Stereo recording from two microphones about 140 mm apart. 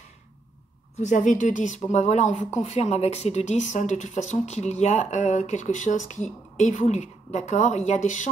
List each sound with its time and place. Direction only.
0.9 s speech: 65° left (ahead or behind)